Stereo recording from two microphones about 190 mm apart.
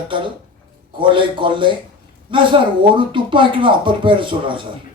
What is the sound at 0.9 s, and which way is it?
Speech, 25° right (ahead or behind).